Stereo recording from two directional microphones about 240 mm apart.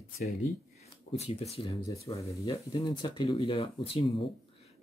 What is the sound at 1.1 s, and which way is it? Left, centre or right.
Speech, left.